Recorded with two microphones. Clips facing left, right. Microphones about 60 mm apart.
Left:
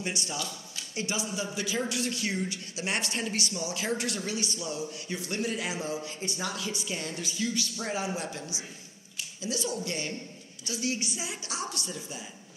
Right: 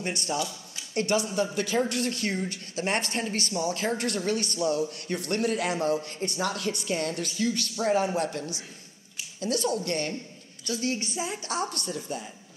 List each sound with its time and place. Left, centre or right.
0.0 s a man's voice: right